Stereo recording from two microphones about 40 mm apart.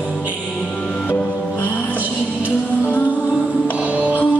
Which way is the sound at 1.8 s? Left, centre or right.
Right.